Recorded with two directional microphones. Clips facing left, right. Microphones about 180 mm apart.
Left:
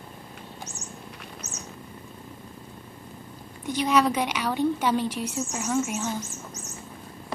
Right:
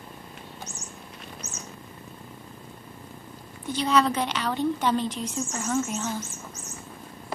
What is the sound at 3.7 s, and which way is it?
A woman's voice, 10° left (ahead or behind).